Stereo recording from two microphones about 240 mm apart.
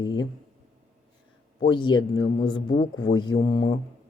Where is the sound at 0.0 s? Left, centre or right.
Centre.